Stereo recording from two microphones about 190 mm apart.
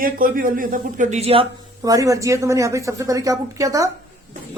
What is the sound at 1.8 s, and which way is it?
A woman's voice, 20° right (ahead or behind).